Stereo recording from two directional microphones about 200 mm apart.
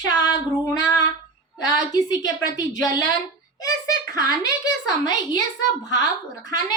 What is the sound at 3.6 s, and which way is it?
Speech, 20° left (ahead or behind).